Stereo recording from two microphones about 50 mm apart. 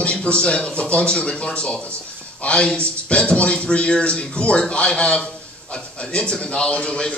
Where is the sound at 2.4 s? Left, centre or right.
Left.